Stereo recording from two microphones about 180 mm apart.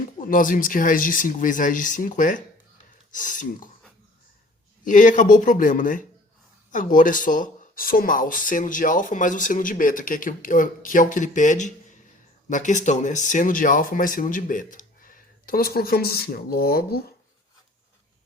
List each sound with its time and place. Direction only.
0.2 s speech: 50° left (ahead or behind)
4.9 s speech: 45° left (ahead or behind)